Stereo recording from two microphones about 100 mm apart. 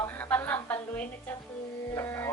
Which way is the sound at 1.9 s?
25° left (ahead or behind).